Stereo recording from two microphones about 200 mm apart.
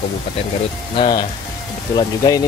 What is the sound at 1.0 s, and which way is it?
Speech, 20° left (ahead or behind).